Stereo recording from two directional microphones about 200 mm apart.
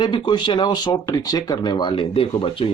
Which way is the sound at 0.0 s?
20° left (ahead or behind).